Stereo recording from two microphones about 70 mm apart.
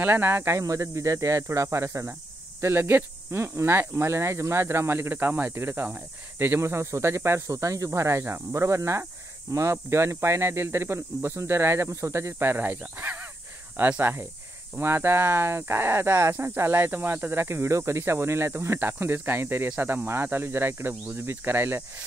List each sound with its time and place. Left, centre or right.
0.0 s speech: right
0.5 s speech: right